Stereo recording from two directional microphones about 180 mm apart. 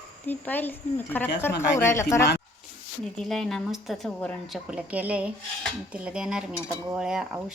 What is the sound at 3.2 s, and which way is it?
A woman's voice, centre (ahead or behind).